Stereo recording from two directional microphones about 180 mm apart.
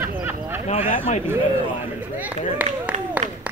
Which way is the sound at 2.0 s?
10° right (ahead or behind).